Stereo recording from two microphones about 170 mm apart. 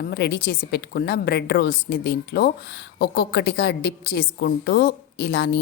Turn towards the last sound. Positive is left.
turn(degrees=80)